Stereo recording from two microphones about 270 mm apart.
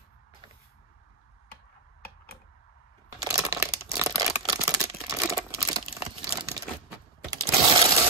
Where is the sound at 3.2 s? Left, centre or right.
Centre.